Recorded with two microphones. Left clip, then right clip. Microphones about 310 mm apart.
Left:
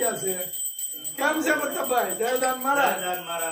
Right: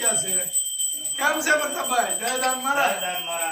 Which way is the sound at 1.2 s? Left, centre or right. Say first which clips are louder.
Right 2 dB; centre.